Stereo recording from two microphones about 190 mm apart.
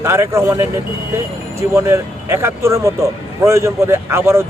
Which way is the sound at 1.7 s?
15° right (ahead or behind).